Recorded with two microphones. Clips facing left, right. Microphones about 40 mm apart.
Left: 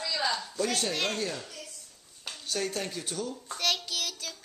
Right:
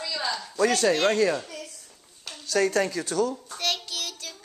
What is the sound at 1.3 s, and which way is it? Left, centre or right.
Speech, right.